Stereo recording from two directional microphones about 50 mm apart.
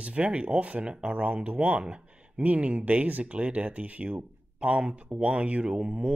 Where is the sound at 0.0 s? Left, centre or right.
Right.